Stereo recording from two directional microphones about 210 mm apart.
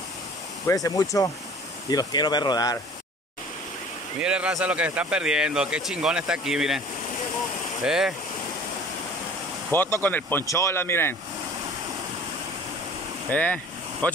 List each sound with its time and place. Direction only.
0.7 s speech: 15° left (ahead or behind)
4.2 s speech: 5° right (ahead or behind)
7.8 s speech: 5° right (ahead or behind)
9.7 s speech: 10° left (ahead or behind)
13.3 s speech: 5° left (ahead or behind)